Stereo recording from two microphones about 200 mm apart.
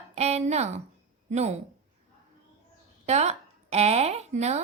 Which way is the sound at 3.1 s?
35° right (ahead or behind).